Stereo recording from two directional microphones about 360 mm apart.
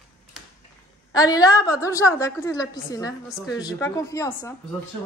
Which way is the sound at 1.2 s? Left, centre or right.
Centre.